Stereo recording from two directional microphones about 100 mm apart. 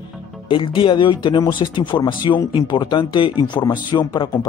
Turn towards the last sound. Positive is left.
turn(degrees=40)  # may be behind; listen again after turning